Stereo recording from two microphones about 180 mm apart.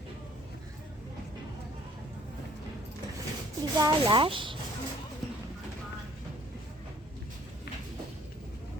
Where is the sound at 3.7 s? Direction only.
25° right (ahead or behind).